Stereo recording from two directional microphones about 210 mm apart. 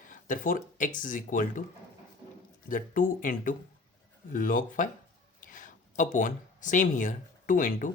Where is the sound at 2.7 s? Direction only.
40° left (ahead or behind).